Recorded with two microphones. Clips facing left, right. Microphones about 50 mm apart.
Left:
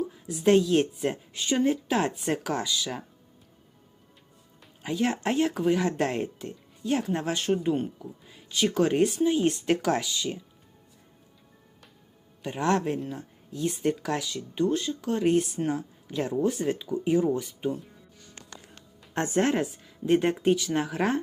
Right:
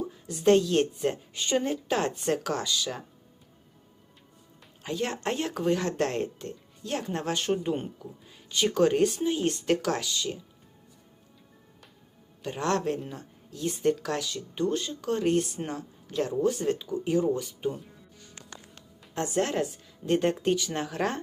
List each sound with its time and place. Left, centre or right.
0.3 s speech: centre
4.8 s speech: centre
12.4 s speech: centre
19.1 s speech: left
19.5 s speech: centre